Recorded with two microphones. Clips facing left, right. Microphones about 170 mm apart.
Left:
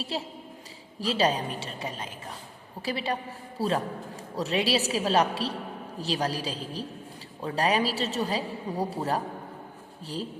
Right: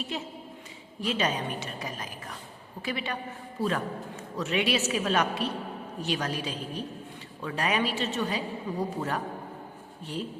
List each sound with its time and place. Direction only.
0.0 s a woman's voice: 35° left (ahead or behind)